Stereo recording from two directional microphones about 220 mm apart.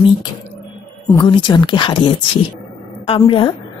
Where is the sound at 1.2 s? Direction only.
20° left (ahead or behind).